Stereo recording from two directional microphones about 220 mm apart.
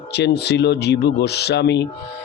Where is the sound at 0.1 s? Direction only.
50° left (ahead or behind).